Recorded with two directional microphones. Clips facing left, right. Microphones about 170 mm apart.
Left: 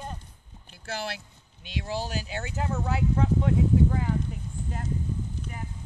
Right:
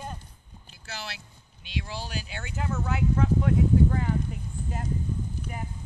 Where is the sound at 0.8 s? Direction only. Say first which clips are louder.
Left 6 dB; 50° left (ahead or behind); by 3.5 s 30° left (ahead or behind).